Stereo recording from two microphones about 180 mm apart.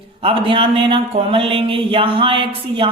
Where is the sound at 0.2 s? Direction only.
30° right (ahead or behind).